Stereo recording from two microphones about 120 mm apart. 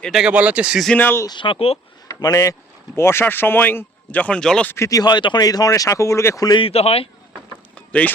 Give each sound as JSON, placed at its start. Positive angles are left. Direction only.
{"t": 0.0, "sound": "speech", "side_deg": -5}
{"t": 0.9, "sound": "speech", "side_deg": 15}
{"t": 1.3, "sound": "speech", "side_deg": 45}
{"t": 2.0, "sound": "speech", "side_deg": 25}
{"t": 4.7, "sound": "speech", "side_deg": 25}
{"t": 6.6, "sound": "speech", "side_deg": 55}
{"t": 7.8, "sound": "a sound", "side_deg": 10}